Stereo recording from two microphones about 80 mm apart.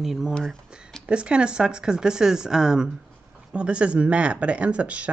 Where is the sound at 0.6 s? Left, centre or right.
Centre.